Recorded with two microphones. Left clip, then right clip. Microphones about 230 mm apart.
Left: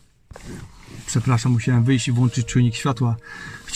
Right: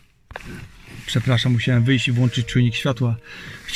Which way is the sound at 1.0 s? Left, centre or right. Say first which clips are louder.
Right 2 dB; left.